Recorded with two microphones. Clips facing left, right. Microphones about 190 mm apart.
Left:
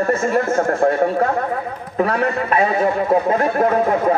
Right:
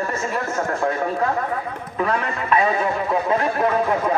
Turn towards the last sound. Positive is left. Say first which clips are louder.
# left 4 dB
turn(degrees=45)  # may be behind; listen again after turning